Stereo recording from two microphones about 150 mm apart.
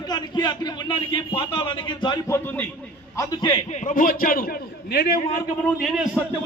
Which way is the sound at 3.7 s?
55° left (ahead or behind).